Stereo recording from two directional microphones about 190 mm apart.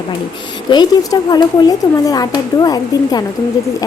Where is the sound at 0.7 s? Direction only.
20° left (ahead or behind).